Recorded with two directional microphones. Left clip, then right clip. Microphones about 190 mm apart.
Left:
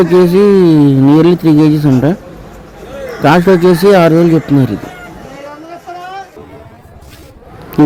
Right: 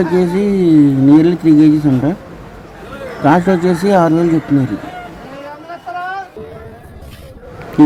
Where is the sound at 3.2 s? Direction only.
35° left (ahead or behind).